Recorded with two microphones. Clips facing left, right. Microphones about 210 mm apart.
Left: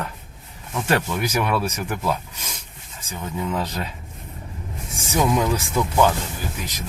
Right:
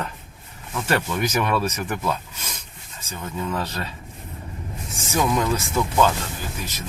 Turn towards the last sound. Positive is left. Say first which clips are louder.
# left 1 dB
turn(degrees=15)  # may be behind; listen again after turning